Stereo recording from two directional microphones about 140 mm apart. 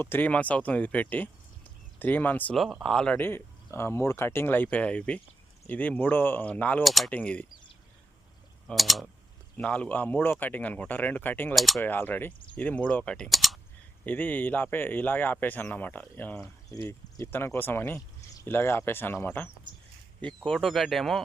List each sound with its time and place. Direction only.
0.0 s speech: 15° left (ahead or behind)
2.6 s speech: centre (ahead or behind)
6.8 s speech: centre (ahead or behind)
8.6 s speech: centre (ahead or behind)
11.5 s speech: centre (ahead or behind)
11.8 s speech: 15° left (ahead or behind)
14.0 s speech: 10° left (ahead or behind)